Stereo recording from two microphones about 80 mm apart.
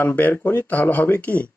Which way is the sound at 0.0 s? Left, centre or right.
Left.